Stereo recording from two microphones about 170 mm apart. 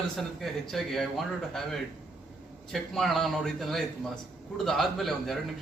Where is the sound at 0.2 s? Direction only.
Centre (ahead or behind).